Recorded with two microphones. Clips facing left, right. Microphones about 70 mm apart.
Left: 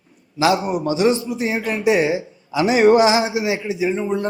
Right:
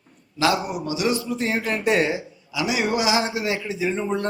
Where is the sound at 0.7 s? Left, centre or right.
Left.